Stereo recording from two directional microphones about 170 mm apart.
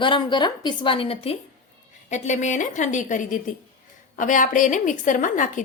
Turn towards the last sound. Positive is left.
turn(degrees=50)  # may be behind; listen again after turning